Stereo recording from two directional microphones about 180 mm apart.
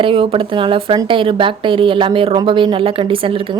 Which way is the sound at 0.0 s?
30° right (ahead or behind).